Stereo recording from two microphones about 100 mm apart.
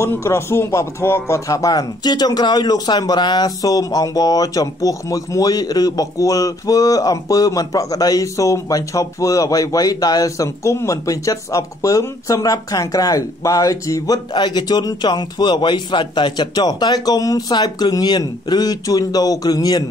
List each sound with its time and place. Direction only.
0.0 s speech: 30° left (ahead or behind)